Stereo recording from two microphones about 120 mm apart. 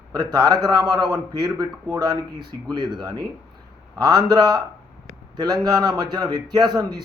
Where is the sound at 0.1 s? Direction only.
35° right (ahead or behind).